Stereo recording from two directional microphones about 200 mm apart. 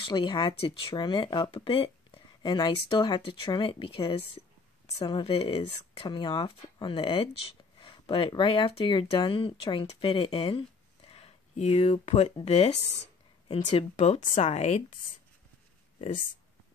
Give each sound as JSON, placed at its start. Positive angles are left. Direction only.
{"t": 0.0, "sound": "a woman's voice", "side_deg": 25}